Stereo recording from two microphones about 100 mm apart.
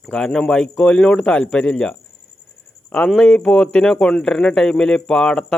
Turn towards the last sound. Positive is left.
turn(degrees=5)  # may be behind; listen again after turning